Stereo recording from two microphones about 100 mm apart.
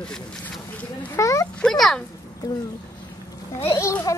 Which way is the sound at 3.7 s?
30° left (ahead or behind).